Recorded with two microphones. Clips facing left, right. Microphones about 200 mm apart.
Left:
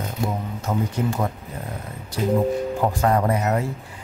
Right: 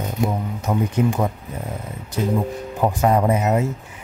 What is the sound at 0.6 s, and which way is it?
Speech, 20° right (ahead or behind).